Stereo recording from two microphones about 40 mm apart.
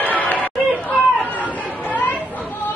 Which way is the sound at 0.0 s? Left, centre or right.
Left.